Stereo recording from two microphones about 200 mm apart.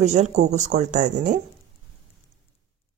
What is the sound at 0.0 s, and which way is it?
Speech, 35° right (ahead or behind).